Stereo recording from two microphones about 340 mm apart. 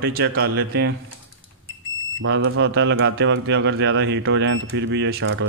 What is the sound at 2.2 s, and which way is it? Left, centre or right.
Speech, right.